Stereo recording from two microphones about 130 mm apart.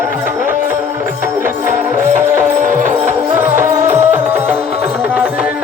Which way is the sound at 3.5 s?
20° right (ahead or behind).